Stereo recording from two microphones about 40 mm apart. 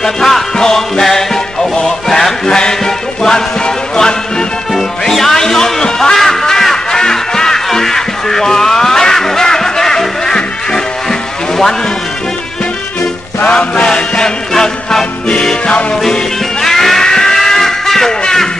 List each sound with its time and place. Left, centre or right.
0.0 s music: centre
13.5 s music: left
16.6 s music: centre
18.2 s a sound: centre